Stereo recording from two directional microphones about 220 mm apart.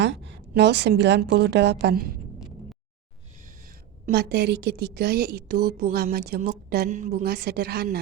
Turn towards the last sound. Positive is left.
turn(degrees=-45)  # may be behind; listen again after turning